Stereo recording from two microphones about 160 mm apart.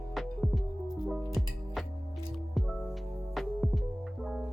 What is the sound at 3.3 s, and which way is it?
Music, centre (ahead or behind).